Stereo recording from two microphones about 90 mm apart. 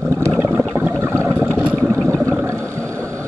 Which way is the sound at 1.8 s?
15° left (ahead or behind).